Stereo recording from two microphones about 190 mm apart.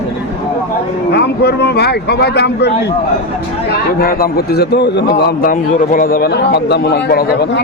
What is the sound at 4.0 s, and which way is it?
A man's voice, 55° left (ahead or behind).